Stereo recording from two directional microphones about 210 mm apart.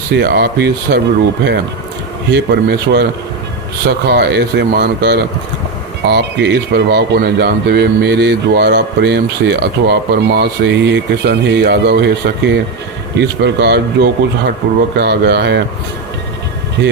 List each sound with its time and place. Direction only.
0.2 s speech: 50° right (ahead or behind)
2.3 s speech: 50° right (ahead or behind)